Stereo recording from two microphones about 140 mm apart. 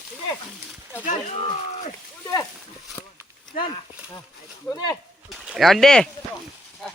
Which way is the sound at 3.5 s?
35° left (ahead or behind).